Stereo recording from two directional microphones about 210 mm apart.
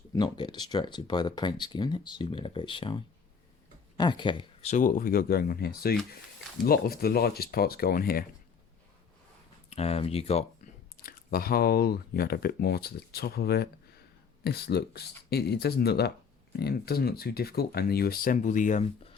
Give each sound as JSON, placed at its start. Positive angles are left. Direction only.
{"t": 0.1, "sound": "speech", "side_deg": 20}
{"t": 9.6, "sound": "speech", "side_deg": 30}
{"t": 10.9, "sound": "speech", "side_deg": 45}